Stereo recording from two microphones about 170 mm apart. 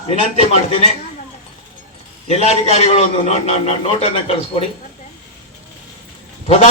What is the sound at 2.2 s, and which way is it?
A man's voice, 40° left (ahead or behind).